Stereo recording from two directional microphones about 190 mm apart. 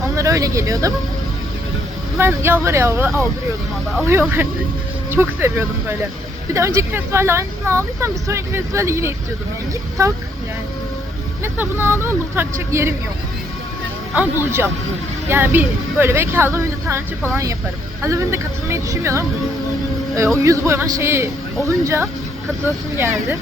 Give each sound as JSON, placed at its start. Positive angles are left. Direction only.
{"t": 0.2, "sound": "speech", "side_deg": -15}
{"t": 2.1, "sound": "speech", "side_deg": -10}
{"t": 11.4, "sound": "speech", "side_deg": -10}
{"t": 14.1, "sound": "speech", "side_deg": -10}
{"t": 18.0, "sound": "speech", "side_deg": -15}